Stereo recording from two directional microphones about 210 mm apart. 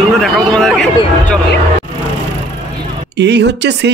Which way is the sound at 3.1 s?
55° right (ahead or behind).